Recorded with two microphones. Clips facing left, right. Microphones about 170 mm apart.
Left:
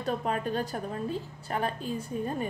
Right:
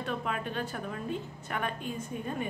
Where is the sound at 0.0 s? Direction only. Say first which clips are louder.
Left 4 dB; 40° left (ahead or behind).